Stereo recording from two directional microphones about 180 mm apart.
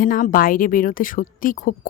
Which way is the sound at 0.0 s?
50° left (ahead or behind).